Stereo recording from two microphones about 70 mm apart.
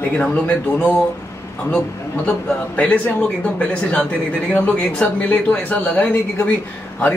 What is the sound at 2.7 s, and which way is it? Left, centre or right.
Speech, left.